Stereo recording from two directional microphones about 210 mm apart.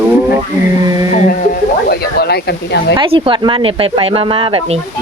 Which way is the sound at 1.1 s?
40° left (ahead or behind).